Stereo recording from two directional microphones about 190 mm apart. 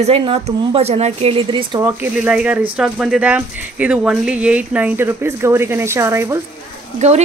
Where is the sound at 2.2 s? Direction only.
5° right (ahead or behind).